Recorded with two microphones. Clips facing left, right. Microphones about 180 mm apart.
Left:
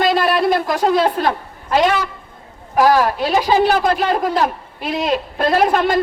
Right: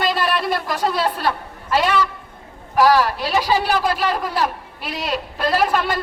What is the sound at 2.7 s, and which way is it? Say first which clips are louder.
A man's voice: left 2 dB; 50° left (ahead or behind).